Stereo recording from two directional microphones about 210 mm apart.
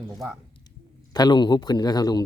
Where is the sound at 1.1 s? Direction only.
20° left (ahead or behind).